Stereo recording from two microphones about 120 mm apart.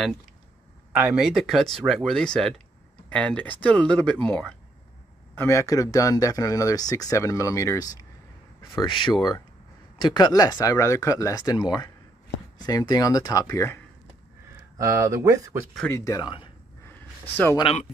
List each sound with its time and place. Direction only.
0.9 s speech: 5° right (ahead or behind); by 8.1 s 30° left (ahead or behind)
8.8 s speech: 45° left (ahead or behind); by 13.7 s 25° left (ahead or behind)
14.8 s speech: 25° right (ahead or behind)
15.9 s speech: 30° left (ahead or behind)
16.8 s a sound: 15° left (ahead or behind)